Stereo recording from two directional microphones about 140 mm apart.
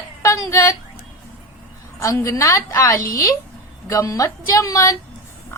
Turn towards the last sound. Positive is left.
turn(degrees=25)  # may be behind; listen again after turning